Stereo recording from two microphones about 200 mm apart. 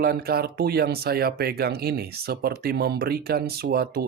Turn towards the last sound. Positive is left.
turn(degrees=-50)  # may be behind; listen again after turning